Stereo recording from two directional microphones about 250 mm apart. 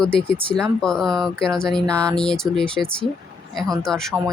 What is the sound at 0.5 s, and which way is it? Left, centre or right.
Speech, centre.